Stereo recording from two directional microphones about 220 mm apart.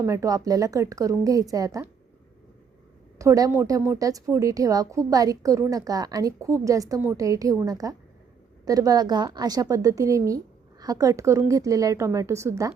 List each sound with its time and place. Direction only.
0.0 s a woman's voice: 15° right (ahead or behind)
3.2 s a woman's voice: 15° right (ahead or behind)